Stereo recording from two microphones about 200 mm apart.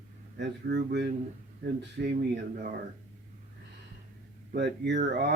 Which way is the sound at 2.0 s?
45° right (ahead or behind).